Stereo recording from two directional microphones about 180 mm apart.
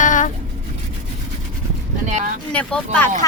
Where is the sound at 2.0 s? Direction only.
45° right (ahead or behind).